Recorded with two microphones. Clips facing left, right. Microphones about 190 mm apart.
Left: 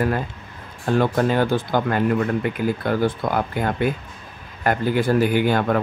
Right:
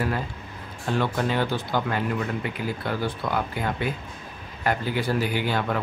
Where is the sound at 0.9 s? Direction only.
45° left (ahead or behind).